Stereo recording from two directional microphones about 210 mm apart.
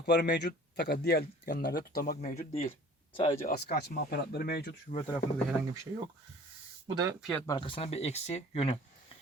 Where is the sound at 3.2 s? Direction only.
25° left (ahead or behind).